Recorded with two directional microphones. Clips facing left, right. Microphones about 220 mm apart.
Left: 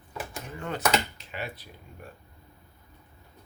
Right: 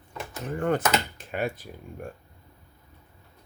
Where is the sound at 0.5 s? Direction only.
50° right (ahead or behind).